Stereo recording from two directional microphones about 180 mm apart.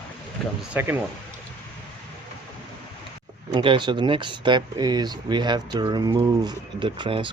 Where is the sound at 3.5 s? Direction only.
25° right (ahead or behind).